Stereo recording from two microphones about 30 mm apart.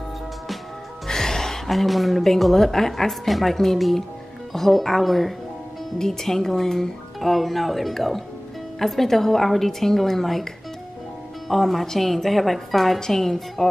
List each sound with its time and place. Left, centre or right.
1.0 s music: centre
1.7 s a woman's voice: centre
3.3 s a woman's voice: centre
5.9 s a woman's voice: centre
7.2 s a woman's voice: centre